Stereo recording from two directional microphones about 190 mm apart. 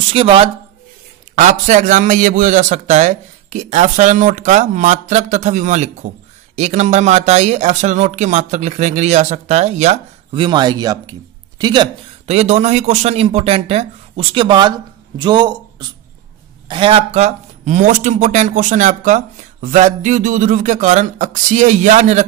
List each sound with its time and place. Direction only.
0.1 s speech: 30° right (ahead or behind)
1.3 s speech: 40° right (ahead or behind); by 11.9 s 20° right (ahead or behind)
12.3 s speech: 35° right (ahead or behind)
16.6 s speech: 25° right (ahead or behind)